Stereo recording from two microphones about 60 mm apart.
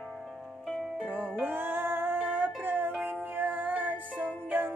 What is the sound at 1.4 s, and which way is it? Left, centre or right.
Music, right.